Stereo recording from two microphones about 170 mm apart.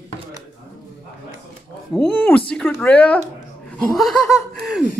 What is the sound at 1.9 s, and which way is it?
Speech, 5° left (ahead or behind).